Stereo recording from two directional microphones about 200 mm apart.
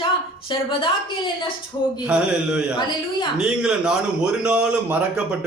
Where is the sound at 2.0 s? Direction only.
5° right (ahead or behind).